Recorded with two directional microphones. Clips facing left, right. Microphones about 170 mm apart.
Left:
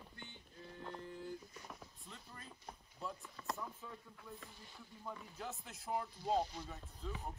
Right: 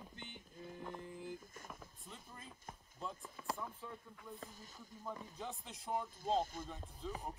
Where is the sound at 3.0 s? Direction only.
5° right (ahead or behind).